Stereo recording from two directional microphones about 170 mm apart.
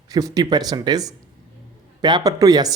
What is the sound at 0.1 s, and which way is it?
A man's voice, 20° right (ahead or behind).